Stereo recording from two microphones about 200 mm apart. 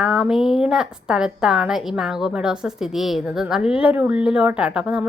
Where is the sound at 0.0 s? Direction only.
Centre (ahead or behind).